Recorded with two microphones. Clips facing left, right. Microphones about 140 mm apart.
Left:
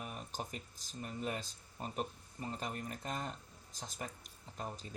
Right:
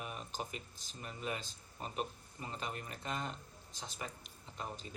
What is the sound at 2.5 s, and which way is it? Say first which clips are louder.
Speech: even; 40° left (ahead or behind).